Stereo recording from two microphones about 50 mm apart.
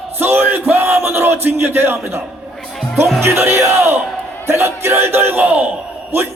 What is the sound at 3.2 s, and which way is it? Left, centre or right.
A man's voice, right.